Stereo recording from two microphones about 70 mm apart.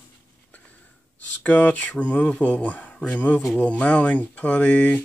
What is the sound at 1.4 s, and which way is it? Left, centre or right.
Speech, left.